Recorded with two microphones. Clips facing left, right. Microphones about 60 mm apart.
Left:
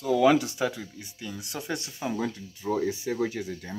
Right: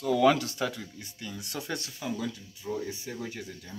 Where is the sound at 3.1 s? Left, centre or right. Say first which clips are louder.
Left 9 dB; left.